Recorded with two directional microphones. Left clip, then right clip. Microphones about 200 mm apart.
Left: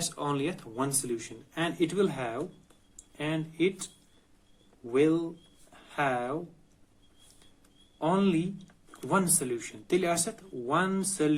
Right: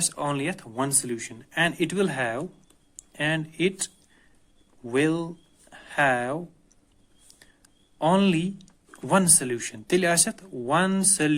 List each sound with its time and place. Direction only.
0.2 s speech: 45° right (ahead or behind)
4.9 s speech: 50° right (ahead or behind)
7.9 s speech: 50° right (ahead or behind)